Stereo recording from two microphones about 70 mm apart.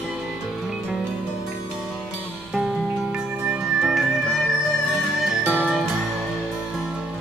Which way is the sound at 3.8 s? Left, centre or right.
Centre.